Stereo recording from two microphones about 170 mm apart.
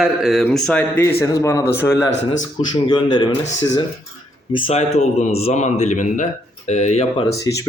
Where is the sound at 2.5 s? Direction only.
25° left (ahead or behind).